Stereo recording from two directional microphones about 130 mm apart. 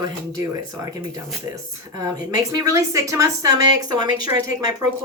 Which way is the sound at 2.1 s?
30° right (ahead or behind).